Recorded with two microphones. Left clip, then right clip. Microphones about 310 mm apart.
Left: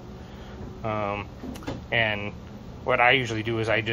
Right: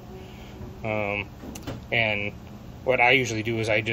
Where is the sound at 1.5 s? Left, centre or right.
Centre.